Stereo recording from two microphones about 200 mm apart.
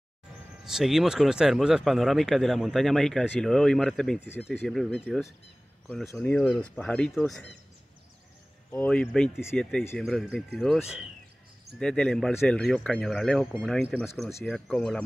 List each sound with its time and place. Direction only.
0.7 s speech: centre (ahead or behind)
8.7 s speech: 5° left (ahead or behind)